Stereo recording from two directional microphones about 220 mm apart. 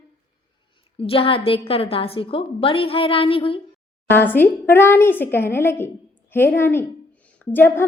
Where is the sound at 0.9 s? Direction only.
25° left (ahead or behind).